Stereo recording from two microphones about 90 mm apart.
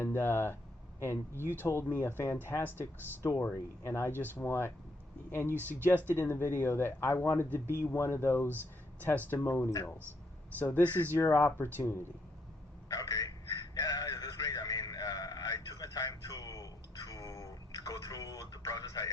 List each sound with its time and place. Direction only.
0.0 s speech: 25° left (ahead or behind)
11.2 s speech: 40° left (ahead or behind)
11.4 s speech: 25° left (ahead or behind)
12.9 s a sound: 40° left (ahead or behind)